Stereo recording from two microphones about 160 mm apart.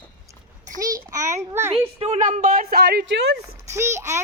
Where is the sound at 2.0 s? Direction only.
45° right (ahead or behind); by 3.2 s 75° right (ahead or behind).